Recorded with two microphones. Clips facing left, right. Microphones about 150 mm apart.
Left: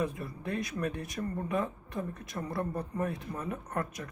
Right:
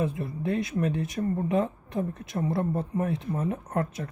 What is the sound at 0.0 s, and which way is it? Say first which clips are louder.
Speech: right 5 dB; 25° right (ahead or behind).